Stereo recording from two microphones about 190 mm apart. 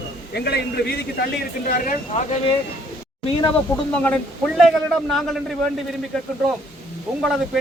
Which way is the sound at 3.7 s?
15° left (ahead or behind).